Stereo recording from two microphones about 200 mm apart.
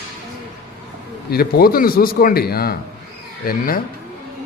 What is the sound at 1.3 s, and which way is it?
A man's voice, 50° left (ahead or behind).